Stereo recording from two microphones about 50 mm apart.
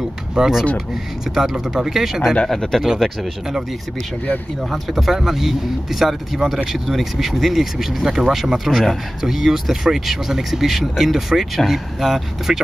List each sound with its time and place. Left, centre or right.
0.3 s speech: centre
2.4 s speech: centre
4.6 s speech: centre